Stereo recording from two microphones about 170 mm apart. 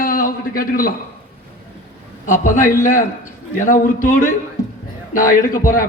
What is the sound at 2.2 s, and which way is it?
A man's voice, 50° left (ahead or behind).